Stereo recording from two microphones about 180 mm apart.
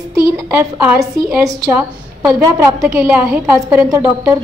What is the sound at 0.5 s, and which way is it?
A woman's voice, 10° right (ahead or behind).